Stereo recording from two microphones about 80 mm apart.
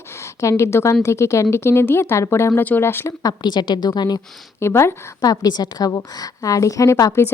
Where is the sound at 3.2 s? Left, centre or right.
Left.